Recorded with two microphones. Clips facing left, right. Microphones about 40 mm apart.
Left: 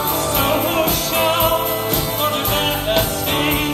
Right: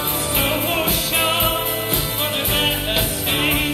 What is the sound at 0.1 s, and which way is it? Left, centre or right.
Music, centre.